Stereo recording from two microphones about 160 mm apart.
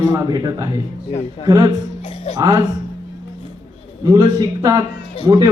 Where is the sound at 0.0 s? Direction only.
25° right (ahead or behind).